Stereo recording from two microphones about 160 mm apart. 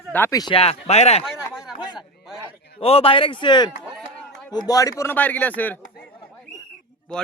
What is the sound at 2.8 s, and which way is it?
Speech, 35° left (ahead or behind).